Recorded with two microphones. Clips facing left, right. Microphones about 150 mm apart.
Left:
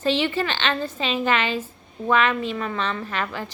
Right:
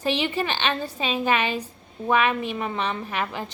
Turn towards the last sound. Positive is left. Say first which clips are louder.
# even
turn(degrees=-20)  # may be behind; listen again after turning